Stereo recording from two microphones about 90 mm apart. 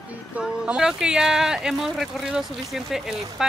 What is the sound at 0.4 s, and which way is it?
Speech, 5° right (ahead or behind).